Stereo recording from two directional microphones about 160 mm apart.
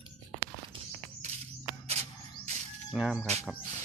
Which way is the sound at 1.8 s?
40° right (ahead or behind).